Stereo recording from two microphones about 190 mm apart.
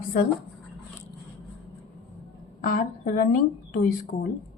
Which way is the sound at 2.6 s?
45° left (ahead or behind).